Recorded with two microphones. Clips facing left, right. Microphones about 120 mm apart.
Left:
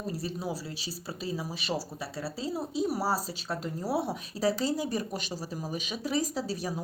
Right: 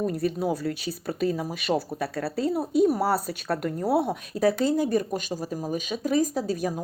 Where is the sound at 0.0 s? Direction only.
55° right (ahead or behind).